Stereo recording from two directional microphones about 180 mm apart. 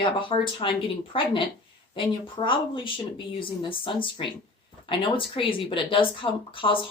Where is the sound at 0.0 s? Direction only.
30° left (ahead or behind).